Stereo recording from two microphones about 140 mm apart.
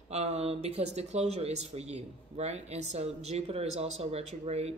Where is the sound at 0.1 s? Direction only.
50° right (ahead or behind).